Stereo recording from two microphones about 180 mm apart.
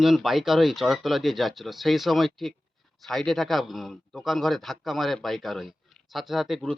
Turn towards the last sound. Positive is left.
turn(degrees=0)  # may be behind; listen again after turning